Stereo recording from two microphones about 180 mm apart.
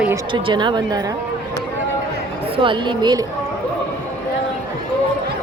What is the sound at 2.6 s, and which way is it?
Speech, 25° right (ahead or behind).